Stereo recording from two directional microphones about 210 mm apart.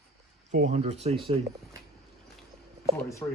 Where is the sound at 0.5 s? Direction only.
35° right (ahead or behind).